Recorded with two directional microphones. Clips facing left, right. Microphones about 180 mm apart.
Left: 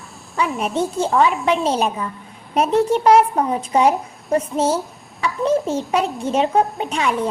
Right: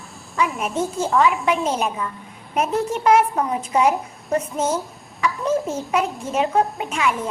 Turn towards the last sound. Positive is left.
turn(degrees=30)  # may be behind; listen again after turning